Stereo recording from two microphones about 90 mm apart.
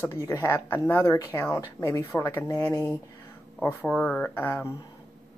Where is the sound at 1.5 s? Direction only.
40° left (ahead or behind).